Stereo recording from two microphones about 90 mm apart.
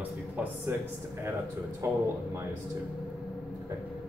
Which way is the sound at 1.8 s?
30° right (ahead or behind).